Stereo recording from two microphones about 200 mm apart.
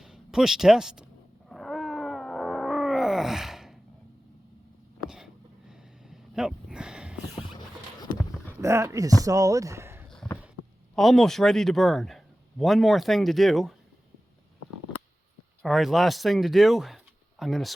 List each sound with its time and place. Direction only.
0.0 s speech: 5° right (ahead or behind)
1.5 s wild animals: centre (ahead or behind)
5.0 s a sound: 5° right (ahead or behind)
8.6 s speech: 15° right (ahead or behind)
10.1 s a sound: centre (ahead or behind)
10.9 s speech: centre (ahead or behind)
15.6 s speech: centre (ahead or behind)